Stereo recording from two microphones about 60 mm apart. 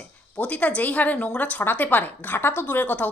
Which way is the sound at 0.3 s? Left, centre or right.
Left.